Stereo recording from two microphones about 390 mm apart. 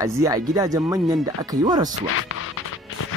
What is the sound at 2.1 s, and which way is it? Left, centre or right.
Music, left.